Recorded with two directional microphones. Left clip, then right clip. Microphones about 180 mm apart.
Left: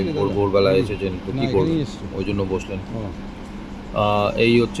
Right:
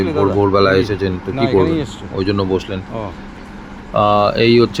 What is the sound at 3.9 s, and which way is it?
Speech, 20° right (ahead or behind).